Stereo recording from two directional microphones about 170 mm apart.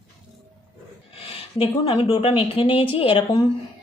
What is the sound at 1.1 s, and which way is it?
Speech, 35° left (ahead or behind).